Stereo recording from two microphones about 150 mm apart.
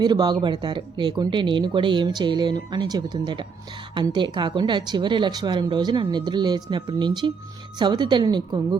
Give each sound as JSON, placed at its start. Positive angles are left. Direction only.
{"t": 0.0, "sound": "speech", "side_deg": -30}